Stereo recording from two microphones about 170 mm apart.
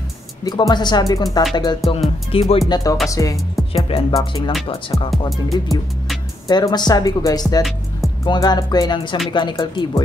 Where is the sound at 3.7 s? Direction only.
35° left (ahead or behind).